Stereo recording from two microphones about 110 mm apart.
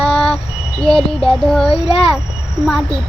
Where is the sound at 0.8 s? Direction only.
5° left (ahead or behind).